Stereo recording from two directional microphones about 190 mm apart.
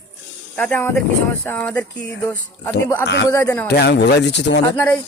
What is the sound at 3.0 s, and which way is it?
Speech, 65° left (ahead or behind).